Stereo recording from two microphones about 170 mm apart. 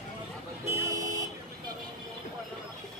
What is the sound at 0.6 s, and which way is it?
Vehicle, 15° right (ahead or behind).